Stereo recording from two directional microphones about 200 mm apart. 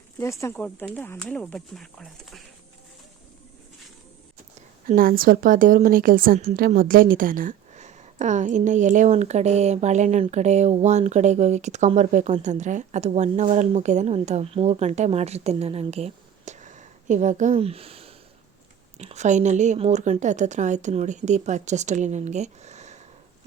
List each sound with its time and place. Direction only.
0.2 s speech: 15° left (ahead or behind)
4.9 s a woman's voice: 45° right (ahead or behind)